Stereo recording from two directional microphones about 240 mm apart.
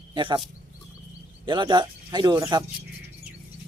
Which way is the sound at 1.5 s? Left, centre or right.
Centre.